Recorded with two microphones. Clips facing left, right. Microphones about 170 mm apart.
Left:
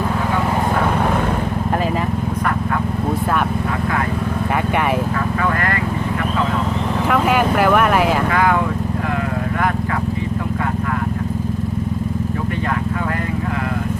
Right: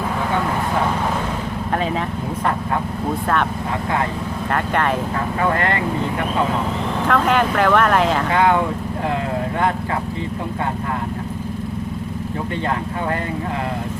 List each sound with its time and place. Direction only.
7.1 s speech: 10° left (ahead or behind)
8.3 s speech: 25° right (ahead or behind)